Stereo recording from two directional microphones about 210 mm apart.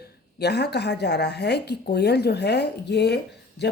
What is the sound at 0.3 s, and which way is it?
Speech, 50° left (ahead or behind).